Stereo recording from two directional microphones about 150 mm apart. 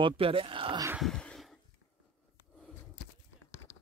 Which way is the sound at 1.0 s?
5° left (ahead or behind).